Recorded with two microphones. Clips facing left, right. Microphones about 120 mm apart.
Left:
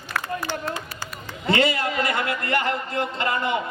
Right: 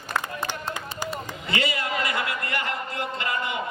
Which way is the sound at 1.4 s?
35° left (ahead or behind).